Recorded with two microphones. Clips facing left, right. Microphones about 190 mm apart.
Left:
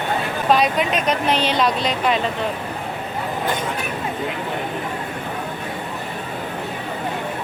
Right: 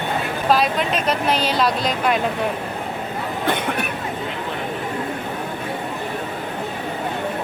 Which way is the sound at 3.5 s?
60° right (ahead or behind).